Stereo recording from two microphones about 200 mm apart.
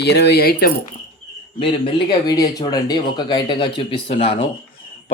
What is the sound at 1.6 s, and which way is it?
Speech, 25° left (ahead or behind).